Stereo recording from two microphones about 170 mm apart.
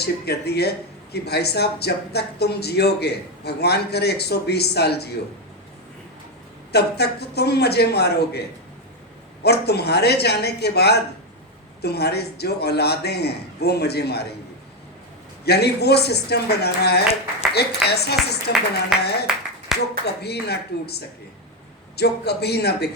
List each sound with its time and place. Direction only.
0.0 s speech: 75° left (ahead or behind)
6.7 s speech: 75° left (ahead or behind)
15.4 s speech: 75° left (ahead or behind)
17.0 s speech: 40° left (ahead or behind)
17.5 s speech: 75° left (ahead or behind)
18.9 s speech: centre (ahead or behind)
20.2 s speech: 75° left (ahead or behind)